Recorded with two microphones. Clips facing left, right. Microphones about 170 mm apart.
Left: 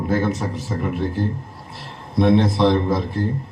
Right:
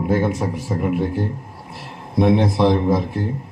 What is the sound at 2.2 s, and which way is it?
Speech, 10° right (ahead or behind).